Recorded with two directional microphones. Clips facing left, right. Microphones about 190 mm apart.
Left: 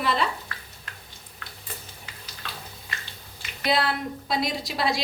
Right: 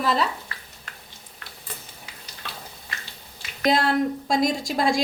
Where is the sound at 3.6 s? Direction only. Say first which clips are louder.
Right 5 dB; 45° right (ahead or behind).